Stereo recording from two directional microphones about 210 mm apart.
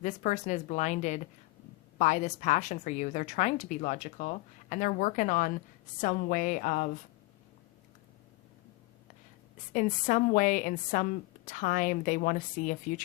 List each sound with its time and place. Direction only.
0.0 s a woman's voice: 35° left (ahead or behind)
9.7 s a woman's voice: 40° left (ahead or behind)